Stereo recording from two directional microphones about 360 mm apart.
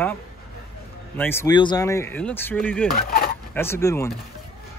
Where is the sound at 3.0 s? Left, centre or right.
Left.